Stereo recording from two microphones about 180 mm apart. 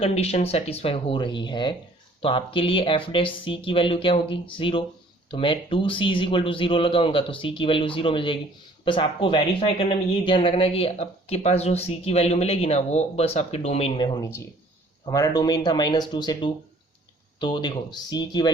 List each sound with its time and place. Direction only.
0.0 s speech: 35° left (ahead or behind)